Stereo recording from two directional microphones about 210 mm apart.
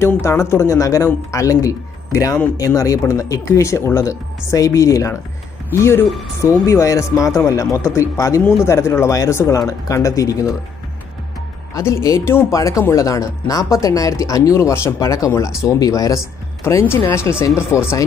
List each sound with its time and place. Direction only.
0.0 s speech: 10° left (ahead or behind)
11.7 s speech: 15° left (ahead or behind)